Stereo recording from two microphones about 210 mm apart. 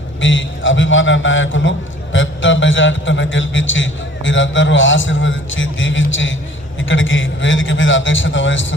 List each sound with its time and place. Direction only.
0.2 s a man's voice: 65° left (ahead or behind)